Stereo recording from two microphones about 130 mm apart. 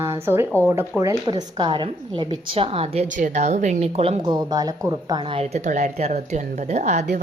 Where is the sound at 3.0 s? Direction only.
75° right (ahead or behind); by 4.2 s 50° right (ahead or behind).